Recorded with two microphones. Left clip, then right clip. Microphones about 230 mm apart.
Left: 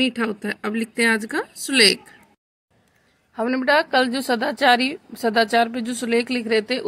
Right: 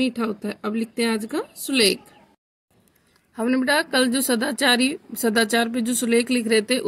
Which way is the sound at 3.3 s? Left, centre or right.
Centre.